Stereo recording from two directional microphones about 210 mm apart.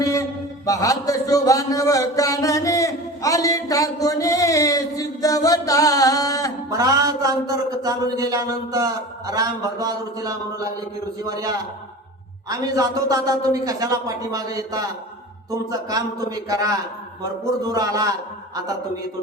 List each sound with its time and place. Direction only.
0.0 s a man's voice: 15° left (ahead or behind)
6.7 s a man's voice: 15° right (ahead or behind)